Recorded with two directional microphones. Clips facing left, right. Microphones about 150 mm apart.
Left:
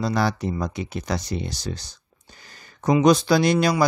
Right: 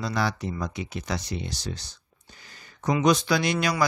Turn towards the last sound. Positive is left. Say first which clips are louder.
# left 6 dB
turn(degrees=35)  # may be behind; listen again after turning